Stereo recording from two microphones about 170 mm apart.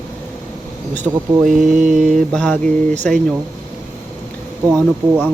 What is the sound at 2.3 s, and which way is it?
Speech, 5° left (ahead or behind).